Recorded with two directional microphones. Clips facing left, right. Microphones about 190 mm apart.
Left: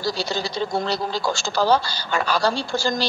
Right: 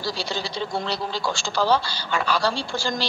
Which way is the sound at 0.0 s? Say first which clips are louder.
Left 3 dB; 40° left (ahead or behind).